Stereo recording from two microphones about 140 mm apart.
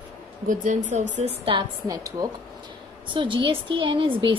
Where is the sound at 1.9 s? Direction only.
25° right (ahead or behind).